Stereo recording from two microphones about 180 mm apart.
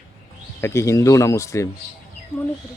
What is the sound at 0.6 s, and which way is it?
Speech, 15° left (ahead or behind).